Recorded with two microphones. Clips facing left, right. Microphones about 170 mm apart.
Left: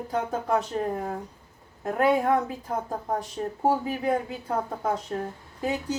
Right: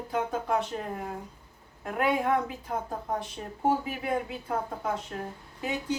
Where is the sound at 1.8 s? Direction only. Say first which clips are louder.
Left 5 dB; 40° left (ahead or behind).